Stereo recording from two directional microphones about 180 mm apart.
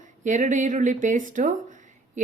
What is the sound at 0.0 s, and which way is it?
Speech, 45° right (ahead or behind).